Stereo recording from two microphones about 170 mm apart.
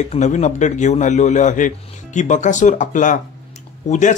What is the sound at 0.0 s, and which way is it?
Speech, 40° left (ahead or behind).